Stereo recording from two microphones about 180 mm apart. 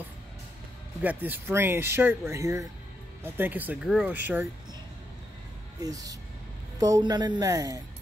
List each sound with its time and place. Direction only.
1.0 s speech: 10° right (ahead or behind)
5.8 s speech: 20° right (ahead or behind)